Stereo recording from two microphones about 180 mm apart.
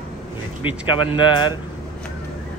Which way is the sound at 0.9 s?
25° left (ahead or behind).